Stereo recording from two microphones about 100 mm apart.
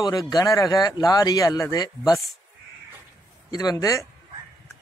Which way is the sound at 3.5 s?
40° left (ahead or behind).